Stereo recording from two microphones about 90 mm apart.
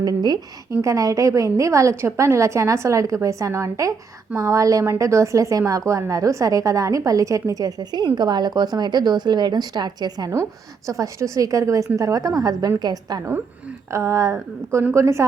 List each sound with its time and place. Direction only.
0.0 s a woman's voice: 50° right (ahead or behind)
0.7 s a woman's voice: 35° right (ahead or behind)
10.8 s a woman's voice: 35° right (ahead or behind)
13.9 s a woman's voice: 35° right (ahead or behind)